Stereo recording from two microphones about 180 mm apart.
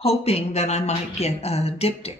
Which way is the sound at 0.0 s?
35° left (ahead or behind).